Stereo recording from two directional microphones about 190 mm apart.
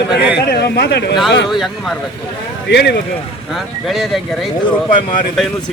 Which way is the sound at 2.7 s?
70° left (ahead or behind).